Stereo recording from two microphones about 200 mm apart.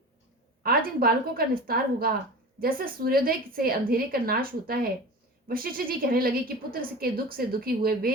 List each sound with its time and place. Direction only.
0.6 s a woman's voice: 50° right (ahead or behind)